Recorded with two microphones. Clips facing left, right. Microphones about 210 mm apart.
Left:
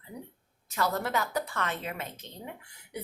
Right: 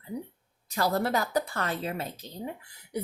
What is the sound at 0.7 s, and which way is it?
Speech, 35° right (ahead or behind).